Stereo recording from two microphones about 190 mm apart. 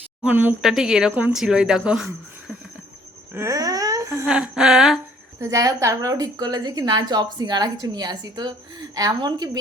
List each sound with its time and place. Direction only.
0.2 s speech: 10° right (ahead or behind)
3.3 s a sound: 15° right (ahead or behind)
4.3 s speech: 5° right (ahead or behind)
5.4 s a woman's voice: 15° right (ahead or behind)